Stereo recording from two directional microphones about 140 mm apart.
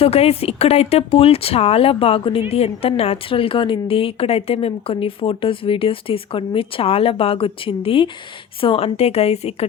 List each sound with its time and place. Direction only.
0.0 s a woman's voice: 45° left (ahead or behind)